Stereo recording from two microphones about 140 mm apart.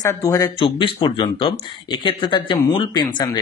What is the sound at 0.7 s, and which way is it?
A man's voice, 40° left (ahead or behind).